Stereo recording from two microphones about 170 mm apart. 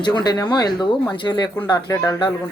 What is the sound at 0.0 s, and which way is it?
A man's voice, 25° left (ahead or behind).